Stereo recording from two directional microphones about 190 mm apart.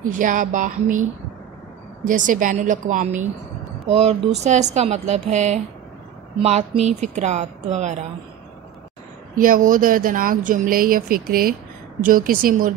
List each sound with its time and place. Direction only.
0.1 s speech: 45° right (ahead or behind)
2.0 s speech: 45° right (ahead or behind)
9.4 s speech: 45° right (ahead or behind)